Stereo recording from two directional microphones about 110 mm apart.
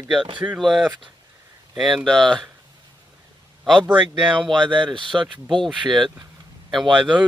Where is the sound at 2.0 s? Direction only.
5° left (ahead or behind).